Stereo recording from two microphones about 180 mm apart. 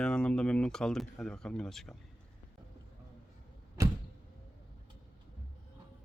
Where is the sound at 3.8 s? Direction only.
20° right (ahead or behind).